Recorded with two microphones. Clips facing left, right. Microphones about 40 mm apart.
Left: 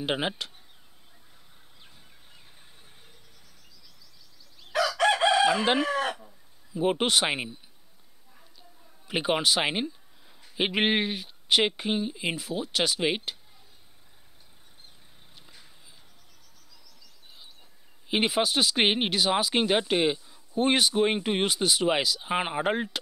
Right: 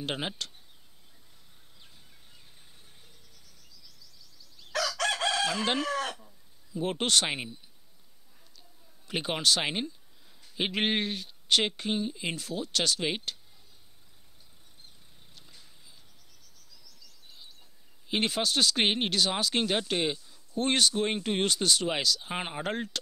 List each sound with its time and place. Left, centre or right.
0.0 s speech: centre
4.6 s chicken: centre
8.5 s a sound: centre
10.4 s speech: centre
15.3 s a sound: centre
16.8 s chirp: centre
18.0 s speech: centre